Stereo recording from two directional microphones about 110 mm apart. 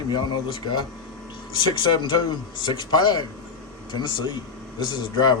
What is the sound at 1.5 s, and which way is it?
Speech, 45° left (ahead or behind).